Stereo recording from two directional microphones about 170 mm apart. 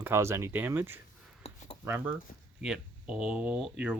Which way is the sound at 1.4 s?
35° left (ahead or behind).